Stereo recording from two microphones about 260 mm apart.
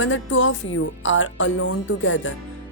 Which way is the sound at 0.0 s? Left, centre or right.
Left.